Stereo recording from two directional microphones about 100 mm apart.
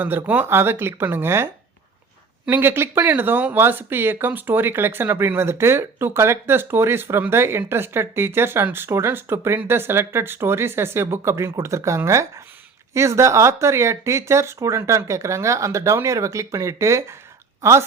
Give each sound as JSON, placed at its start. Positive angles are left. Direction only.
{"t": 0.0, "sound": "speech", "side_deg": -20}
{"t": 2.5, "sound": "speech", "side_deg": -20}